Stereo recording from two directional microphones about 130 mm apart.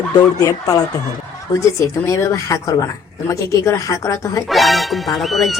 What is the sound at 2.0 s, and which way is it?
Speech, 25° left (ahead or behind).